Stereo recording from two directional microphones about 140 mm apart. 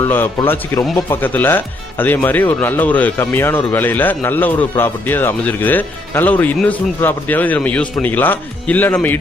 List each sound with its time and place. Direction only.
0.0 s speech: 15° left (ahead or behind)